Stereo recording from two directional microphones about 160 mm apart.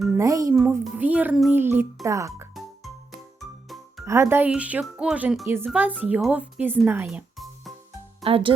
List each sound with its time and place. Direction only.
0.2 s speech: 20° right (ahead or behind)
2.6 s music: centre (ahead or behind)
4.0 s speech: 15° right (ahead or behind)
6.8 s music: 10° right (ahead or behind)
8.2 s speech: 35° right (ahead or behind)